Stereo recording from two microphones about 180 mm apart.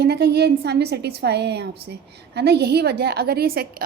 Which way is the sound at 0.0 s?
65° right (ahead or behind).